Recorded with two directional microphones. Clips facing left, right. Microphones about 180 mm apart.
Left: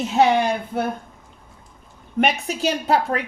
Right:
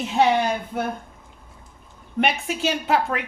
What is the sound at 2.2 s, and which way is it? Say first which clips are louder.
Speech: left 2 dB; 40° left (ahead or behind).